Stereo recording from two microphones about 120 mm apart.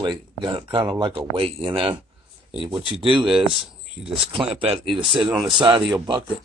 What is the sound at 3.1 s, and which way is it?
Speech, 5° right (ahead or behind).